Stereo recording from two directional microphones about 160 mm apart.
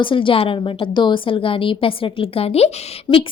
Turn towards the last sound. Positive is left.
turn(degrees=25)  # may be behind; listen again after turning